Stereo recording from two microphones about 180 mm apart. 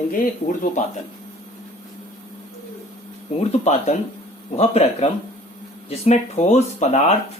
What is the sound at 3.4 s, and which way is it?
Speech, 35° left (ahead or behind).